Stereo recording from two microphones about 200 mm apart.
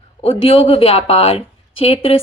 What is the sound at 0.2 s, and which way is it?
A woman's voice, 30° left (ahead or behind).